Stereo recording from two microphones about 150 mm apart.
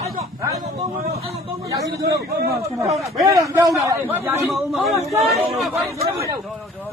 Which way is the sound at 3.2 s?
25° right (ahead or behind).